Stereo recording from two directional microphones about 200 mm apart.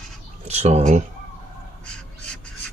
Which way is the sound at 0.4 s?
35° right (ahead or behind).